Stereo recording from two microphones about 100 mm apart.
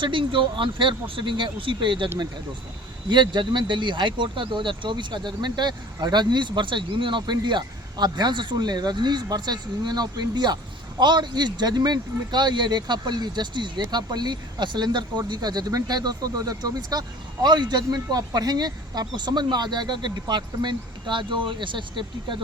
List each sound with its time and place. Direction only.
0.0 s speech: 55° right (ahead or behind)
3.1 s a man's voice: 50° right (ahead or behind)